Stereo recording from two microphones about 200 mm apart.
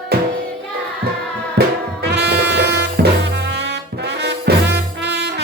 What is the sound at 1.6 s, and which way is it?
Music, 55° right (ahead or behind).